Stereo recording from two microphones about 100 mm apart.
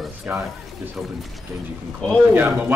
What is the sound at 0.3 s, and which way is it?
Speech, 20° right (ahead or behind).